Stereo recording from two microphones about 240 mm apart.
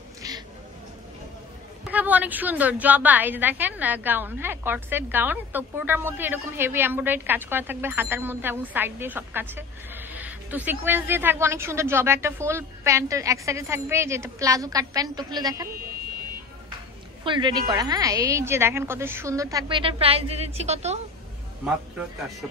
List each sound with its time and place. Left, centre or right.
1.9 s a woman's voice: centre
17.2 s a woman's voice: centre